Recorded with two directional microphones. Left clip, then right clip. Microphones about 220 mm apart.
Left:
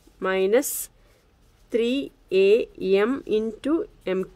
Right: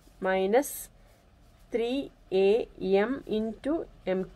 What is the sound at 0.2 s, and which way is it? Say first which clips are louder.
Speech: left 4 dB; 55° left (ahead or behind).